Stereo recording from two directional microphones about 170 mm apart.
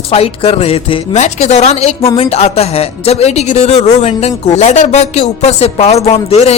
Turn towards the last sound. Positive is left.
turn(degrees=35)  # may be behind; listen again after turning